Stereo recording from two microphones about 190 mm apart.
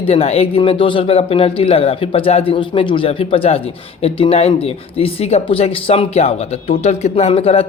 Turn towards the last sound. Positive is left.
turn(degrees=30)  # may be behind; listen again after turning